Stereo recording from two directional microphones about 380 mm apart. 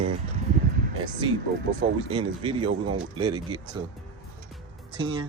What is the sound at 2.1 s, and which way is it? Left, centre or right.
Speech, centre.